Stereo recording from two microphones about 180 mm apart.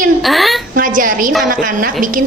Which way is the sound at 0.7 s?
50° right (ahead or behind).